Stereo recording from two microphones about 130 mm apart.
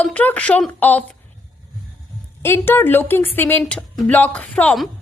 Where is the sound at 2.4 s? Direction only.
15° left (ahead or behind).